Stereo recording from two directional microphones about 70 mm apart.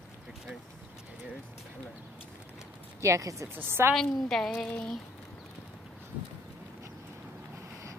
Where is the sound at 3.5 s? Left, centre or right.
Right.